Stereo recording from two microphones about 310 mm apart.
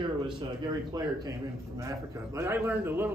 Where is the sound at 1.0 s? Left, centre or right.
Centre.